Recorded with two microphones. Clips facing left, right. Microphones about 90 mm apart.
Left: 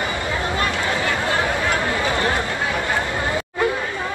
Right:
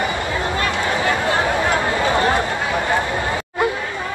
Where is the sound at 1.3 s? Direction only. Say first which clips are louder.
Right 3 dB; 20° right (ahead or behind).